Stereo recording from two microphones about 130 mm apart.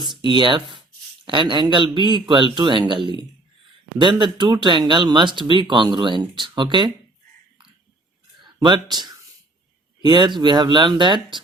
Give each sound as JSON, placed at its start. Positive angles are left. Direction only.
{"t": 0.3, "sound": "speech", "side_deg": -35}
{"t": 8.4, "sound": "speech", "side_deg": -35}